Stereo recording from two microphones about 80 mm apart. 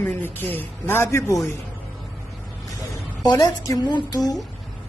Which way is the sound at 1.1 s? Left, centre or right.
Left.